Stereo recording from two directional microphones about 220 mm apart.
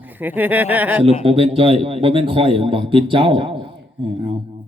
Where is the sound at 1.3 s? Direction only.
25° right (ahead or behind).